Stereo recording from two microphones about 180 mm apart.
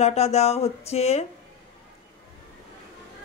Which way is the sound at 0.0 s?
40° left (ahead or behind).